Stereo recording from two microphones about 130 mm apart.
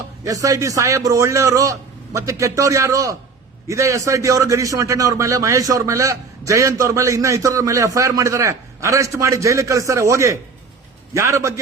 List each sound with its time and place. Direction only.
0.3 s a man's voice: 25° right (ahead or behind)